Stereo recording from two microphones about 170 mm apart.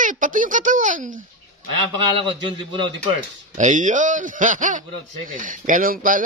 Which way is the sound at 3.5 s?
45° right (ahead or behind).